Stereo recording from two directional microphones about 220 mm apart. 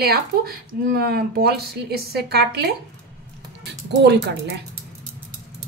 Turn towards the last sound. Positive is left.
turn(degrees=-50)  # may be behind; listen again after turning